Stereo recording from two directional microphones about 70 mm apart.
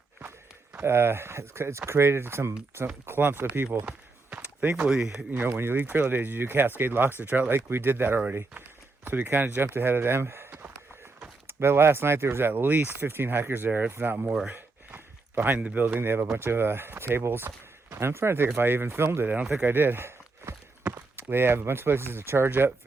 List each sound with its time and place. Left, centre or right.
0.8 s speech: right
3.8 s a sound: right
4.7 s speech: centre
5.5 s speech: right
19.6 s a sound: right
21.2 s speech: right